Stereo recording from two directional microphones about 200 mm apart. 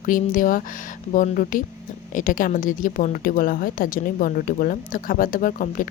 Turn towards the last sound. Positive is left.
turn(degrees=45)  # may be behind; listen again after turning